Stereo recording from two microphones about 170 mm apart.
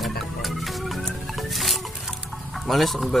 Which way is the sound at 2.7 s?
Centre (ahead or behind).